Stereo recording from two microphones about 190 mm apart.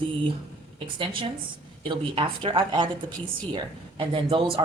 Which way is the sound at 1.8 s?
25° right (ahead or behind).